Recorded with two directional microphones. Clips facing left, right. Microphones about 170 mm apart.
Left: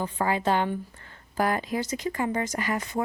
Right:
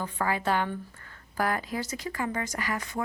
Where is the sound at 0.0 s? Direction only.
25° left (ahead or behind).